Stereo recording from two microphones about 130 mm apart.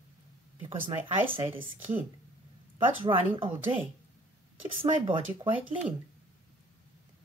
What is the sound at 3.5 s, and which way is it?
Speech, 15° right (ahead or behind).